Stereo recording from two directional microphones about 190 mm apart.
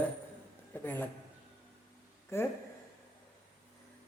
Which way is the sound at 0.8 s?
10° left (ahead or behind).